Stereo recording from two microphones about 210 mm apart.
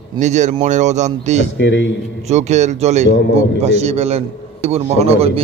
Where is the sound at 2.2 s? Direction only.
35° right (ahead or behind).